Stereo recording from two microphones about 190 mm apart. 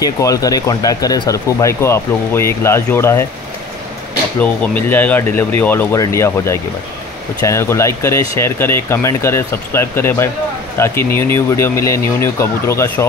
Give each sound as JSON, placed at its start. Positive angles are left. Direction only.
{"t": 0.0, "sound": "speech", "side_deg": 20}
{"t": 4.4, "sound": "speech", "side_deg": 10}